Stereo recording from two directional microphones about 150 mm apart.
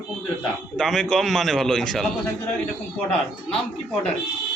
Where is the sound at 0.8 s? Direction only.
5° left (ahead or behind).